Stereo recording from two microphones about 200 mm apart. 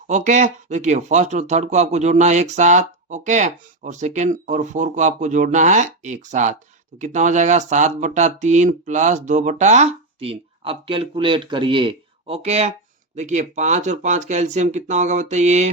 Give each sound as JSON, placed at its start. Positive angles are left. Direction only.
{"t": 0.1, "sound": "speech", "side_deg": -35}